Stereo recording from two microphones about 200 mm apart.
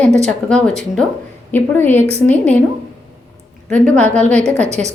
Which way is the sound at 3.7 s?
5° left (ahead or behind).